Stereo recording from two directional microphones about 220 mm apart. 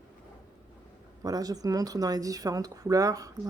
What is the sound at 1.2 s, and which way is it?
Speech, 15° right (ahead or behind).